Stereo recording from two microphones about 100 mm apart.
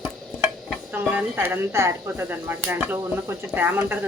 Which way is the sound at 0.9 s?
20° right (ahead or behind).